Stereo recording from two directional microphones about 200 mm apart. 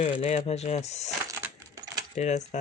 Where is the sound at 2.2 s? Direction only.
35° left (ahead or behind).